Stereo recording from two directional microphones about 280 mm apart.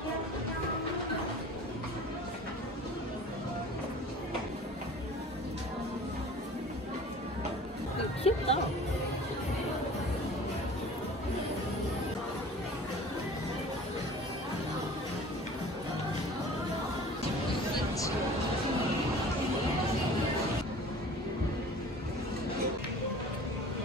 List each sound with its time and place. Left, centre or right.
8.2 s music: left